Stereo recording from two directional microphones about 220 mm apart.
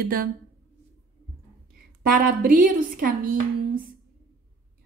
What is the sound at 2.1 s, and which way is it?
A woman's voice, 40° right (ahead or behind).